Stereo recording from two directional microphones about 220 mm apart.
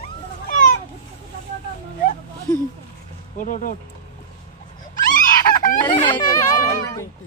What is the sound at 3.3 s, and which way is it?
Speech, 35° left (ahead or behind).